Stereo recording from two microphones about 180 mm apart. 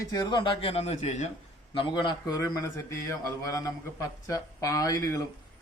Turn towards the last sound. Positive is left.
turn(degrees=15)  # may be behind; listen again after turning